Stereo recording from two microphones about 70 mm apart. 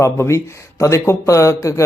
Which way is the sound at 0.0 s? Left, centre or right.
Left.